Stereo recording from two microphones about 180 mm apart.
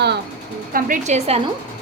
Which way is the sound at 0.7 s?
50° right (ahead or behind).